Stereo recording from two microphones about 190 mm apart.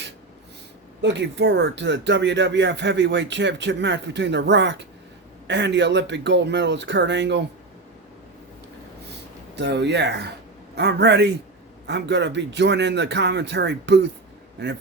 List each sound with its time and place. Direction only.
1.0 s speech: 70° right (ahead or behind)
9.6 s speech: 65° right (ahead or behind)